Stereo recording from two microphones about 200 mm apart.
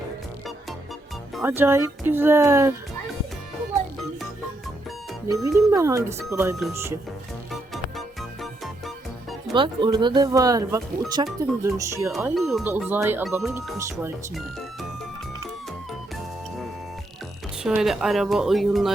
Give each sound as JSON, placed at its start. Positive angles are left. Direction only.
{"t": 1.4, "sound": "speech", "side_deg": -10}
{"t": 5.5, "sound": "speech", "side_deg": -15}
{"t": 7.5, "sound": "music", "side_deg": 0}
{"t": 9.6, "sound": "speech", "side_deg": -25}
{"t": 12.2, "sound": "speech", "side_deg": 0}
{"t": 17.6, "sound": "speech", "side_deg": 0}